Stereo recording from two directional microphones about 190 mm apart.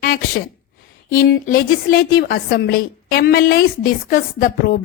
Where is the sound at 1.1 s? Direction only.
50° left (ahead or behind).